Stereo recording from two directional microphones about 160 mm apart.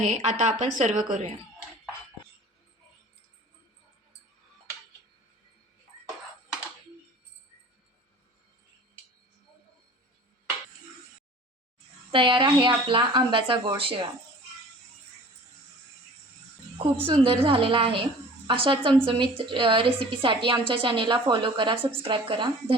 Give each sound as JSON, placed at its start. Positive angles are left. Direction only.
{"t": 0.0, "sound": "a woman's voice", "side_deg": -45}
{"t": 12.1, "sound": "a woman's voice", "side_deg": -30}
{"t": 17.1, "sound": "a woman's voice", "side_deg": -35}